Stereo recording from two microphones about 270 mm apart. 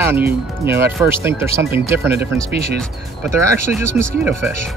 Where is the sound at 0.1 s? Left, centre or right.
Centre.